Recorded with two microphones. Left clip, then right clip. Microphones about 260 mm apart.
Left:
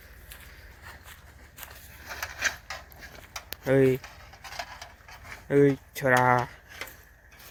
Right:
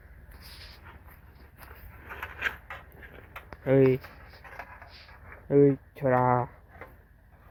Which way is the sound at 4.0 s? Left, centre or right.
Left.